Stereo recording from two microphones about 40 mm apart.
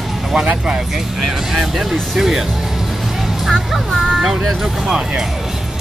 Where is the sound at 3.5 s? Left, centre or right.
Centre.